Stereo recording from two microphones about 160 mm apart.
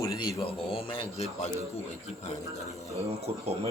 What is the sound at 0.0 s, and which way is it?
A man's voice, 25° left (ahead or behind).